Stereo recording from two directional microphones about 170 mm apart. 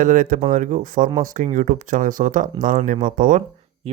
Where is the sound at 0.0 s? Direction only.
50° right (ahead or behind).